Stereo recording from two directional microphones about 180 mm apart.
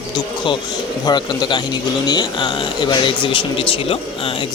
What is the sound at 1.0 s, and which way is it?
Speech, 25° left (ahead or behind).